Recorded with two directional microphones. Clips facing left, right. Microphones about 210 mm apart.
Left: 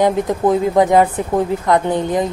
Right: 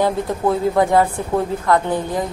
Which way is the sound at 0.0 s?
15° left (ahead or behind).